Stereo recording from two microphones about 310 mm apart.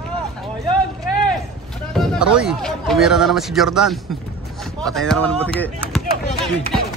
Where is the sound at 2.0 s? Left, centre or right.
Centre.